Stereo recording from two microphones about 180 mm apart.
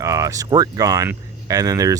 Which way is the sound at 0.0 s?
20° right (ahead or behind).